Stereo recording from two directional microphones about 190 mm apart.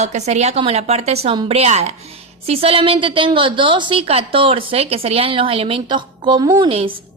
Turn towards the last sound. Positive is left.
turn(degrees=-30)  # may be behind; listen again after turning